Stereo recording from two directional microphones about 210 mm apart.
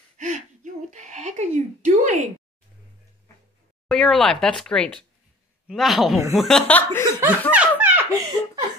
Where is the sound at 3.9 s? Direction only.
Centre (ahead or behind).